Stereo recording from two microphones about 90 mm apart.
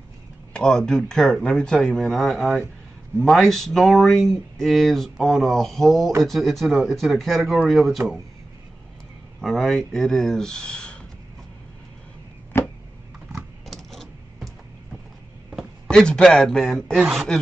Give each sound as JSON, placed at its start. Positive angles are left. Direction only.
{"t": 0.5, "sound": "speech", "side_deg": 10}
{"t": 9.4, "sound": "speech", "side_deg": 5}
{"t": 12.6, "sound": "a sound", "side_deg": 25}
{"t": 13.3, "sound": "typing", "side_deg": 0}
{"t": 15.9, "sound": "speech", "side_deg": 10}